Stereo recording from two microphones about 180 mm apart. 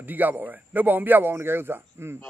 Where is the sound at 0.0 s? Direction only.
10° right (ahead or behind).